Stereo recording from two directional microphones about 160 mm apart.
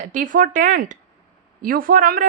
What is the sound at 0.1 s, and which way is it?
Speech, 55° right (ahead or behind).